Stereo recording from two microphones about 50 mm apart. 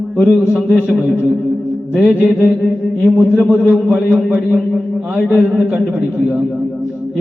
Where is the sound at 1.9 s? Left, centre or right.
Right.